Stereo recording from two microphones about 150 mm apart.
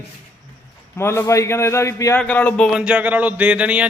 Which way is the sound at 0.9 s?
15° left (ahead or behind).